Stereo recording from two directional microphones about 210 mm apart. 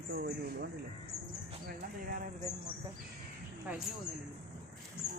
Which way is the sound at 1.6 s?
40° right (ahead or behind).